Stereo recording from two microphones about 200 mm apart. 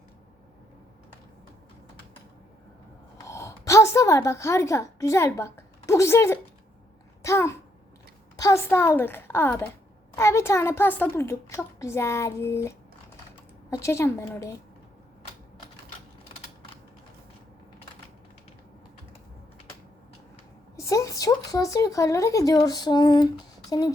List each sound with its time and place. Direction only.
3.2 s a woman's voice: 15° left (ahead or behind)
20.7 s speech: 15° left (ahead or behind)